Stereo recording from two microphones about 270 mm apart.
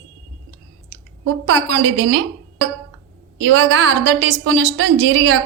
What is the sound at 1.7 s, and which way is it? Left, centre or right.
Speech, right.